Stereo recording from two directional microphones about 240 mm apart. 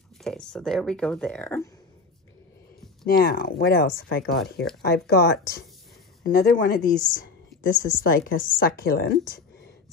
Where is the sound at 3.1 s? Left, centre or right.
Left.